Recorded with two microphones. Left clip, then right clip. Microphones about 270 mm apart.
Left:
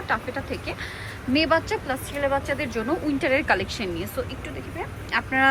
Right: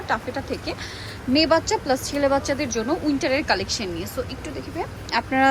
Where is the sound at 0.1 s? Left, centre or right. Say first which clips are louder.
Right 1 dB; centre.